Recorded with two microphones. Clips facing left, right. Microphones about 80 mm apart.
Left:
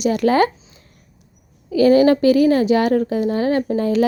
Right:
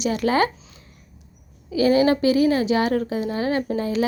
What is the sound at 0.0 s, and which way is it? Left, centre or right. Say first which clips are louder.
Speech: left 5 dB; left.